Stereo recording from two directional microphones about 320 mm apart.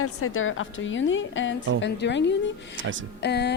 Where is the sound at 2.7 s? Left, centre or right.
Right.